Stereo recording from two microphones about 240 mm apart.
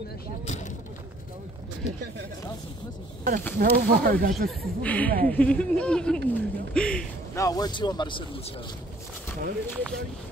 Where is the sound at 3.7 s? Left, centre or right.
Right.